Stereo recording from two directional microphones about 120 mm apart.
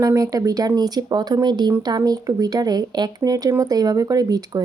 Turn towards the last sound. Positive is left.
turn(degrees=-30)  # may be behind; listen again after turning